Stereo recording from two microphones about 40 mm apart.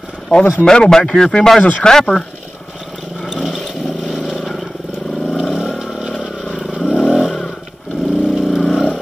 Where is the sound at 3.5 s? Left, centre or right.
Centre.